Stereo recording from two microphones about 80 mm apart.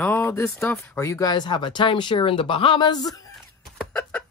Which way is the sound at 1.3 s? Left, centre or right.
Left.